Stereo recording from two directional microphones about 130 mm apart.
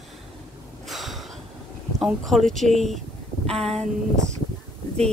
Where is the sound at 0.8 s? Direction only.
Centre (ahead or behind).